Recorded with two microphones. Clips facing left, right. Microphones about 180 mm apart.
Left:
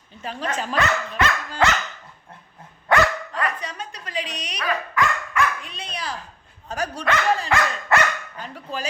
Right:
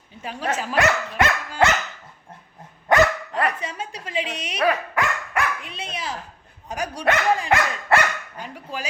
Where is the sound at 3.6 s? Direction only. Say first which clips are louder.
Right 2 dB; 25° right (ahead or behind).